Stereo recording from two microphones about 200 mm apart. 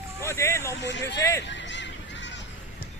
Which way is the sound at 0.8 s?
60° left (ahead or behind).